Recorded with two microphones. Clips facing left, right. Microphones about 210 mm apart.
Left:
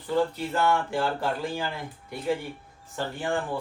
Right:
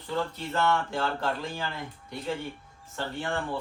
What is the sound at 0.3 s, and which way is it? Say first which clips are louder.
Speech: left 2 dB; 10° left (ahead or behind).